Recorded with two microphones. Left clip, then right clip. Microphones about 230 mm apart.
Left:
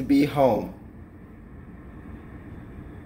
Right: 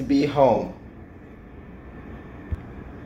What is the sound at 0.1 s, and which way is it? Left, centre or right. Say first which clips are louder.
Speech: right 2 dB; left.